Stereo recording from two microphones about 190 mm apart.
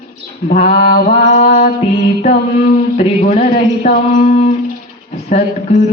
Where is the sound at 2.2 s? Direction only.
40° left (ahead or behind).